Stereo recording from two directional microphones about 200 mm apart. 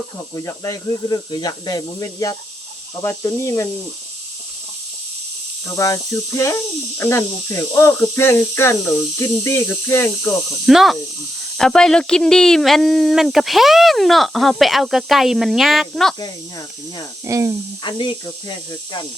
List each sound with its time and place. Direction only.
0.3 s speech: 15° left (ahead or behind)
5.6 s speech: 15° left (ahead or behind)
10.7 s speech: centre (ahead or behind)
16.2 s speech: 20° left (ahead or behind)
17.2 s speech: 15° right (ahead or behind)
17.8 s speech: 25° left (ahead or behind)